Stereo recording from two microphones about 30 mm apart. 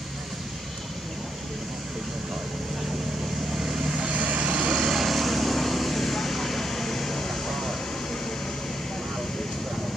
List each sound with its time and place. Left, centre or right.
3.5 s vehicle: centre
4.1 s vehicle: right
4.5 s vehicle: right
4.9 s vehicle: centre